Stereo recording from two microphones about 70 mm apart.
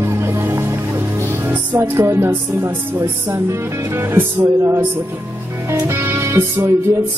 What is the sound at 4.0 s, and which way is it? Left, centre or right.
Music, right.